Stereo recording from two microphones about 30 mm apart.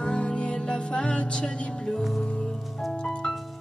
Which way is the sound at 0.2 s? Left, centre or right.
Left.